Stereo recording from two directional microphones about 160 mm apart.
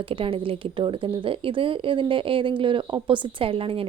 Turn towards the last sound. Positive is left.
turn(degrees=-35)  # may be behind; listen again after turning